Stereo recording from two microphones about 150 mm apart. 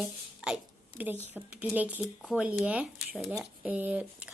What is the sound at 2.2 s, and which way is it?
Speech, centre (ahead or behind).